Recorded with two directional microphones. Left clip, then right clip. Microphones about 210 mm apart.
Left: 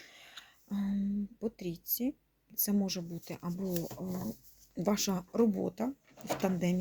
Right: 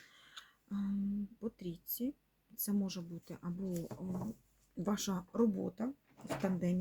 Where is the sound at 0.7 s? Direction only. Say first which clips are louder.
Left 4 dB; 25° left (ahead or behind).